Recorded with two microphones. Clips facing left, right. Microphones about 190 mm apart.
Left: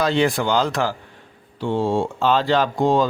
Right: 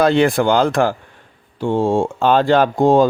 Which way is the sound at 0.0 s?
55° right (ahead or behind).